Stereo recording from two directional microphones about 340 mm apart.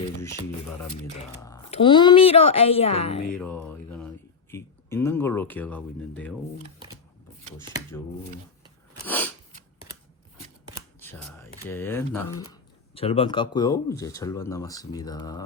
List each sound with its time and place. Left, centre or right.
1.5 s speech: centre
3.3 s a sound: centre
4.5 s speech: centre
9.0 s speech: centre
11.0 s scissors: centre
11.7 s speech: centre